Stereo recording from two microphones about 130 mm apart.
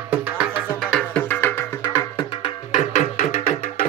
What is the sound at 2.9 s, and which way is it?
Music, 80° left.